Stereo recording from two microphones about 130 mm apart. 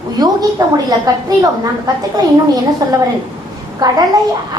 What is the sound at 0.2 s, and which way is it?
A woman's voice, 30° right (ahead or behind).